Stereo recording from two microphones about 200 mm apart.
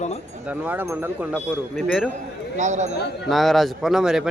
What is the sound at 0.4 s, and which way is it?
Speech, 5° right (ahead or behind).